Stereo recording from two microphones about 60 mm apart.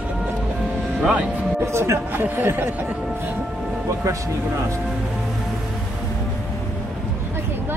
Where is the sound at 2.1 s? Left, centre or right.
Right.